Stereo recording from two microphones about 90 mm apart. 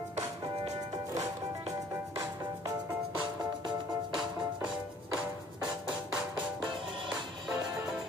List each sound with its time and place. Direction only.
2.1 s music: 35° right (ahead or behind)
4.1 s music: 5° right (ahead or behind)